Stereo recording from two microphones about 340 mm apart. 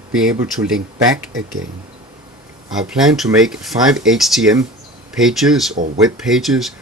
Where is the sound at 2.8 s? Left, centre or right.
Centre.